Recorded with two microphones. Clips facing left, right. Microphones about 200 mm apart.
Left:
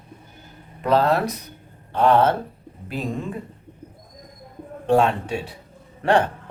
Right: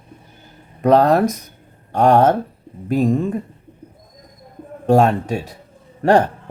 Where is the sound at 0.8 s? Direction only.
45° right (ahead or behind).